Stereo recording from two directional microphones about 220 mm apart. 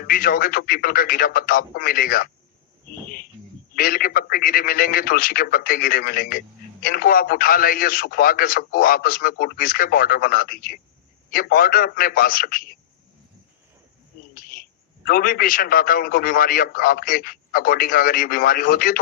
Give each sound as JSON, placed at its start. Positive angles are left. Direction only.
{"t": 0.1, "sound": "a man's voice", "side_deg": 40}
{"t": 3.8, "sound": "a man's voice", "side_deg": 40}
{"t": 15.0, "sound": "a man's voice", "side_deg": 40}